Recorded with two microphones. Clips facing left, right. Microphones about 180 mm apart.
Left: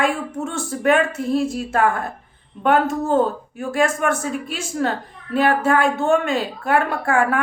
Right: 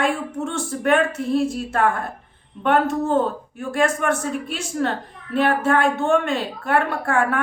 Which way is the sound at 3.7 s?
5° left (ahead or behind).